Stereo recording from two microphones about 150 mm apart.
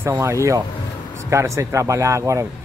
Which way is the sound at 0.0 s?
15° right (ahead or behind).